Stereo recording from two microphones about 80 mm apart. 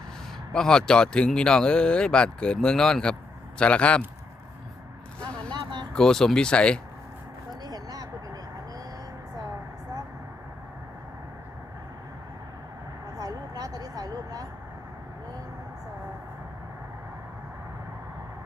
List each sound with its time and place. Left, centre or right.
0.5 s speech: centre
5.9 s speech: centre
7.6 s vehicle: right
13.1 s vehicle: right